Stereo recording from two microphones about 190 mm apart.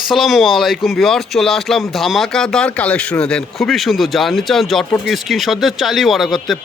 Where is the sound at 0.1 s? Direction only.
Centre (ahead or behind).